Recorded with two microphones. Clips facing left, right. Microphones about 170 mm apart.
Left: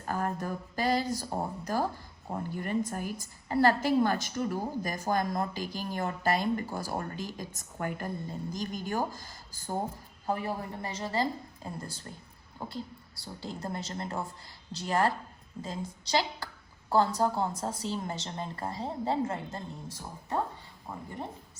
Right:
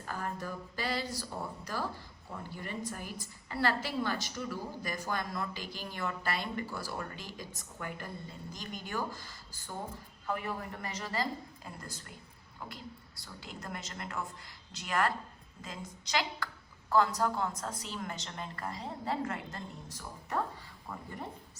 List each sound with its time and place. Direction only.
0.0 s a woman's voice: 45° left (ahead or behind); by 20.4 s 25° left (ahead or behind)